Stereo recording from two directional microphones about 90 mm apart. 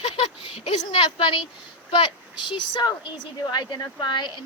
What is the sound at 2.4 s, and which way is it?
Speech, 55° left (ahead or behind).